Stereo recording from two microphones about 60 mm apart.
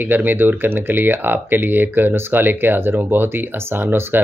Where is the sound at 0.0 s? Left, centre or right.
Right.